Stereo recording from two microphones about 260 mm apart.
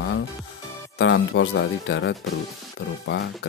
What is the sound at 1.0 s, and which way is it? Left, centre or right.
Speech, left.